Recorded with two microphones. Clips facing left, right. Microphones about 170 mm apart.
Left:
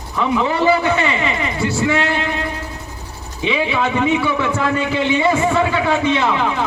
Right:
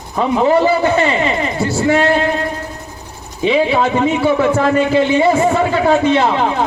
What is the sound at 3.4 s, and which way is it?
A man's voice, 40° right (ahead or behind).